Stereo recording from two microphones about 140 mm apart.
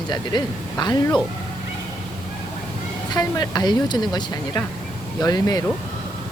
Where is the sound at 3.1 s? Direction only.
30° left (ahead or behind).